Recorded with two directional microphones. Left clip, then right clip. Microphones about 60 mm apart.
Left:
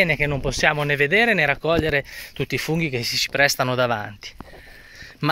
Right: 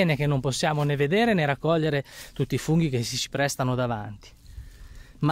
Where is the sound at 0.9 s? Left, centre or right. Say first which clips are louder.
Left 4 dB; right.